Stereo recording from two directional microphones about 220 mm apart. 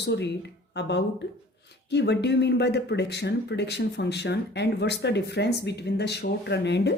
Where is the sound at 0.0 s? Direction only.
50° left (ahead or behind).